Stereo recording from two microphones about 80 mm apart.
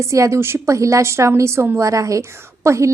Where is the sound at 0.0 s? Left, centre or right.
Right.